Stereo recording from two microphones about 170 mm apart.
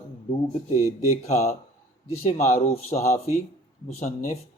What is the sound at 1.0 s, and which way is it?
Speech, 40° left (ahead or behind).